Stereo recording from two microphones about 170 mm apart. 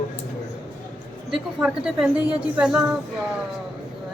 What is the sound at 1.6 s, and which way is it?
Speech, 5° right (ahead or behind).